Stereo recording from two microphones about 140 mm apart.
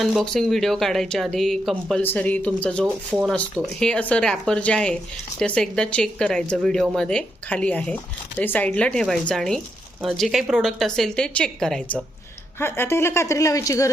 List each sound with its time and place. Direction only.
0.0 s speech: centre (ahead or behind)
2.8 s speech: 10° right (ahead or behind)
3.3 s speech: 5° left (ahead or behind)
12.5 s a woman's voice: 15° left (ahead or behind)